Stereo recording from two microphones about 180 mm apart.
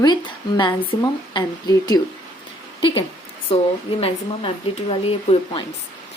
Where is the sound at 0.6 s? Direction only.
25° left (ahead or behind).